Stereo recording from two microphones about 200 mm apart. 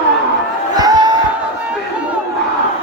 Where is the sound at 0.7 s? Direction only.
20° right (ahead or behind).